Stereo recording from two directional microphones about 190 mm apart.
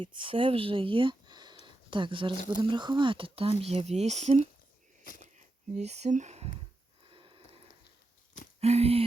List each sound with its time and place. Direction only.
0.0 s speech: 25° right (ahead or behind)
1.6 s a sound: 25° right (ahead or behind)
2.3 s speech: 40° left (ahead or behind)
2.6 s speech: 25° right (ahead or behind)
5.7 s speech: 35° right (ahead or behind)
7.1 s a sound: 30° right (ahead or behind)
8.6 s speech: 35° right (ahead or behind)